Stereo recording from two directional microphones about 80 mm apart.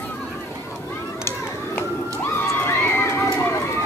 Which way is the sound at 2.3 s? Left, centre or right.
Left.